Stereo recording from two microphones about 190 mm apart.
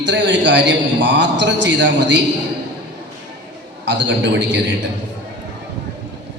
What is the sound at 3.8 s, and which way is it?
Speech, 70° right (ahead or behind).